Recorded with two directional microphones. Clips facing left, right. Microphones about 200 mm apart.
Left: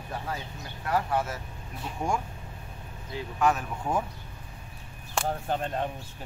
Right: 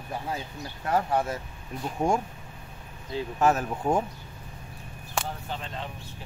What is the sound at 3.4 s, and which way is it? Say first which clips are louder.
Speech: right 2 dB; 40° right (ahead or behind).